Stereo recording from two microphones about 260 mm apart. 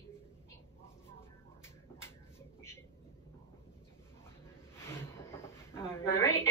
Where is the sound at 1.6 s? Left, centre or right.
Centre.